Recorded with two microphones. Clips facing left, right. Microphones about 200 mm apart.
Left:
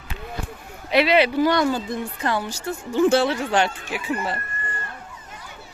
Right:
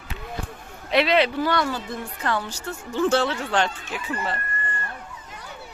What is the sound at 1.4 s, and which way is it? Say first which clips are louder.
Speech: left 5 dB; 15° left (ahead or behind).